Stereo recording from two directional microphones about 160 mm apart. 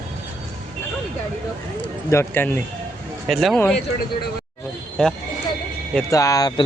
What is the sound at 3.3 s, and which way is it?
Speech, centre (ahead or behind).